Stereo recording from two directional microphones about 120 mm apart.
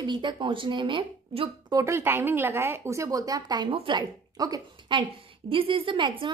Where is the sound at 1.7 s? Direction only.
20° right (ahead or behind).